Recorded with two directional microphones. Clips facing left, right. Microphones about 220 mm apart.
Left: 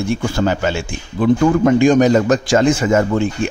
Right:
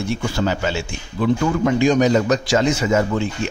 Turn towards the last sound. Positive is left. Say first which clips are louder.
# left 4 dB
turn(degrees=50)  # may be behind; listen again after turning